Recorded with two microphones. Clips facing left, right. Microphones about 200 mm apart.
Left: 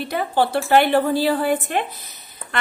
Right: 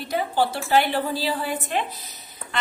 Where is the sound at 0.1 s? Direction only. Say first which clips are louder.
Left 2 dB; 60° left (ahead or behind).